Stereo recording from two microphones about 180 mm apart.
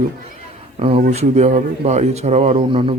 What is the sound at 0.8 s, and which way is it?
Speech, 35° right (ahead or behind).